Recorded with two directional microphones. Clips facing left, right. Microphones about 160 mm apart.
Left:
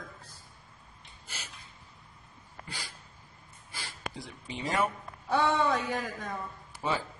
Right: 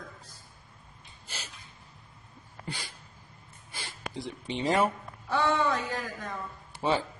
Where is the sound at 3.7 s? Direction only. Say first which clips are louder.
Right 1 dB; 25° right (ahead or behind).